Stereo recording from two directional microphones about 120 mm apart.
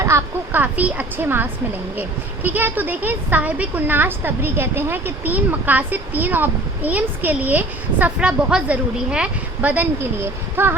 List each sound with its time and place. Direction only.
0.0 s a woman's voice: 25° right (ahead or behind)